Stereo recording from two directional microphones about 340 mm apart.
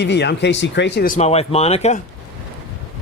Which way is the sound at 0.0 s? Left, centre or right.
Left.